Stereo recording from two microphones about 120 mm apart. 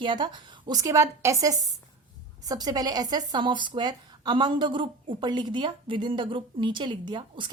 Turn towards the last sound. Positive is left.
turn(degrees=-40)  # may be behind; listen again after turning